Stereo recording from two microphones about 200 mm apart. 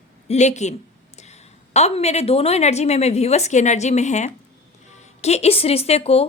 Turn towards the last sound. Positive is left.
turn(degrees=30)  # may be behind; listen again after turning